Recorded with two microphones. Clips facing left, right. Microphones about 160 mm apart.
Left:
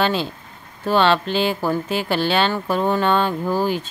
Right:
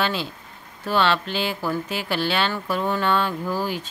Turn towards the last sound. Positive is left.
turn(degrees=45)  # may be behind; listen again after turning